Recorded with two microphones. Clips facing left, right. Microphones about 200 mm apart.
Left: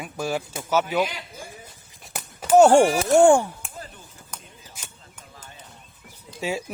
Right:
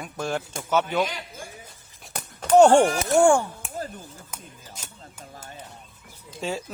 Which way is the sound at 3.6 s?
Centre (ahead or behind).